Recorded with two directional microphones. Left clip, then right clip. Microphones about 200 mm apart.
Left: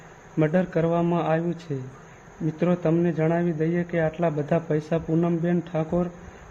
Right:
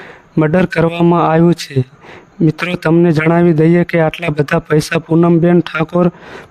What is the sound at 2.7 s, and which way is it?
Speech, 55° right (ahead or behind).